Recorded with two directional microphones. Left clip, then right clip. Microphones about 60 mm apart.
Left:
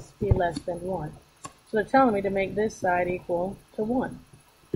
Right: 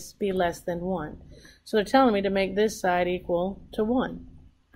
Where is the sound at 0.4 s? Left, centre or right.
Centre.